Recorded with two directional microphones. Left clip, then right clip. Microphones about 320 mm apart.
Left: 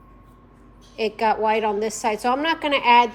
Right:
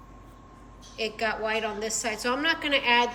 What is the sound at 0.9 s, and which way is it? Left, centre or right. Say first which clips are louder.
A woman's voice: left 8 dB; centre.